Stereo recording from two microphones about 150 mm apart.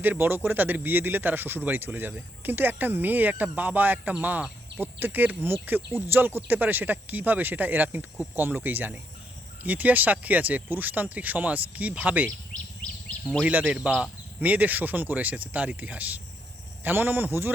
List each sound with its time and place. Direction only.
0.0 s speech: 15° right (ahead or behind)
13.4 s speech: 10° right (ahead or behind)